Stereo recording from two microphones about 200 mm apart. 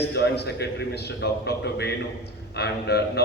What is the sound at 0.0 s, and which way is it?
A man's voice, 55° left (ahead or behind).